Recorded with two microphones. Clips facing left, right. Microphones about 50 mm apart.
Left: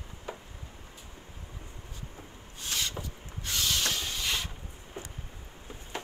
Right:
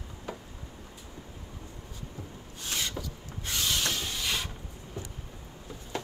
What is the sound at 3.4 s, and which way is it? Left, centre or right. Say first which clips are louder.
Rub: even; right.